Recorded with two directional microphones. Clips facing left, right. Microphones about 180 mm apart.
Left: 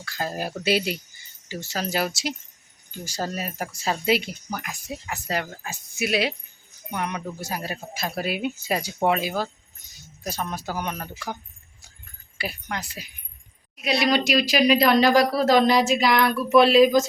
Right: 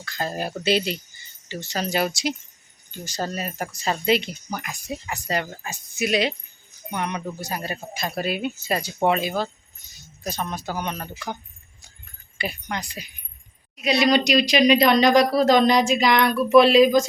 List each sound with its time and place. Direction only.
0.0 s speech: 5° left (ahead or behind)
9.8 s keys jangling: 15° left (ahead or behind)
10.2 s speech: 10° left (ahead or behind)
12.4 s speech: 5° left (ahead or behind)